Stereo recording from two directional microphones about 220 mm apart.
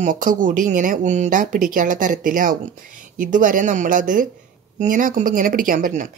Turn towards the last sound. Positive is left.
turn(degrees=-35)  # may be behind; listen again after turning